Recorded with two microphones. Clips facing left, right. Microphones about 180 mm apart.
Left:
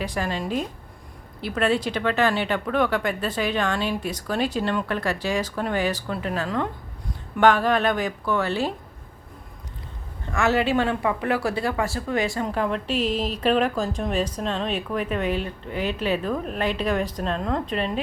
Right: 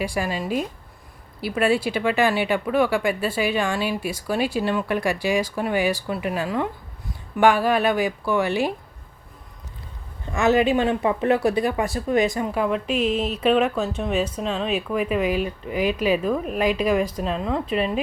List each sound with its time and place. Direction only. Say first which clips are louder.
0.0 s speech: right 2 dB; 10° right (ahead or behind)
10.3 s speech: right 3 dB; 20° right (ahead or behind)
13.1 s speech: right 2 dB; 35° left (ahead or behind)
13.4 s speech: right 2 dB; centre (ahead or behind)